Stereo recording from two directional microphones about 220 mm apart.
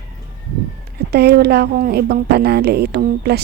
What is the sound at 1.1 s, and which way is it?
A woman's voice, 45° right (ahead or behind).